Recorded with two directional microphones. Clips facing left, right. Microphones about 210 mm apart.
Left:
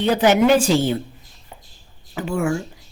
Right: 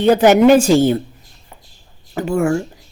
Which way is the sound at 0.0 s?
45° right (ahead or behind).